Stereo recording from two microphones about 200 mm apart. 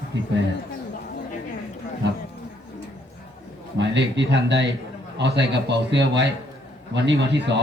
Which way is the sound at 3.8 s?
60° right (ahead or behind).